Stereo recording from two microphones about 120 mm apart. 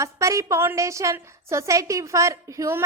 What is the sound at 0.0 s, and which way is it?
A woman's voice, 25° right (ahead or behind).